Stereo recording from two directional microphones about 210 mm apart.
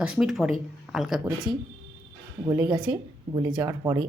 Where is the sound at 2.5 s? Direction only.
20° right (ahead or behind).